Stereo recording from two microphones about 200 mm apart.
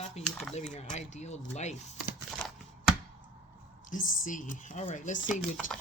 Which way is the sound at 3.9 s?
40° left (ahead or behind).